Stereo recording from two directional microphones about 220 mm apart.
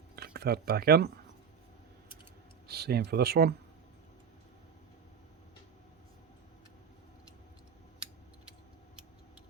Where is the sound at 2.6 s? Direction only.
45° right (ahead or behind).